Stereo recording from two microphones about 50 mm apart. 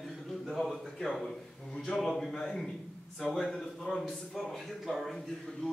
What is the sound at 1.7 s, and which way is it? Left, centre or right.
Speech, centre.